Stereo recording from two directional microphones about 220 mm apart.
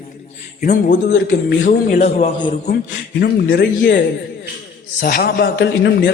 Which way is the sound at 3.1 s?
50° left (ahead or behind).